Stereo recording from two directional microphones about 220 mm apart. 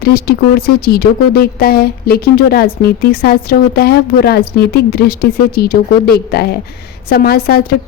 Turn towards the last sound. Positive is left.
turn(degrees=45)  # may be behind; listen again after turning